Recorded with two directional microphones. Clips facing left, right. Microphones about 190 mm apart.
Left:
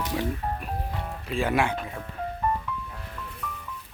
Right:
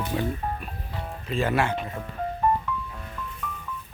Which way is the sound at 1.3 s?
10° left (ahead or behind).